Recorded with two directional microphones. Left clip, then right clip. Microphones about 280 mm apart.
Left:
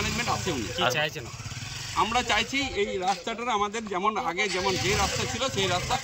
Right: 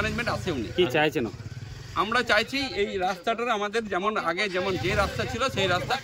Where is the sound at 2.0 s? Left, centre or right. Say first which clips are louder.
Right 2 dB; centre.